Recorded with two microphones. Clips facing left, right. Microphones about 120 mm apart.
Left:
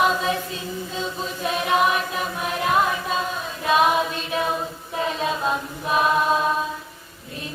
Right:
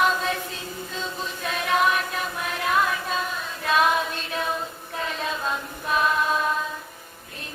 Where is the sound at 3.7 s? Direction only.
15° left (ahead or behind).